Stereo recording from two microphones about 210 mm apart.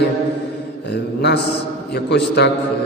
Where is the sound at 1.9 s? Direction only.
55° left (ahead or behind).